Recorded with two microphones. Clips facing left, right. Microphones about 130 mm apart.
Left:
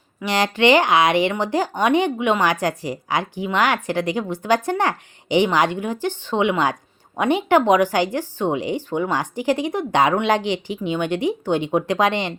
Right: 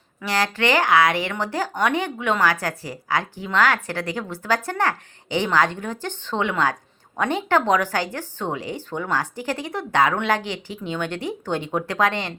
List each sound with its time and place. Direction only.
0.2 s speech: 20° left (ahead or behind)